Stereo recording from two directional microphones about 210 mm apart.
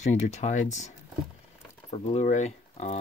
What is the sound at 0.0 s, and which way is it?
Speech, 35° left (ahead or behind).